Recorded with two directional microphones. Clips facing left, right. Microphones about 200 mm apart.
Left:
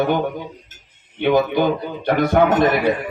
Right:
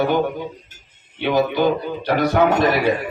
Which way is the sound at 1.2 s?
50° left (ahead or behind).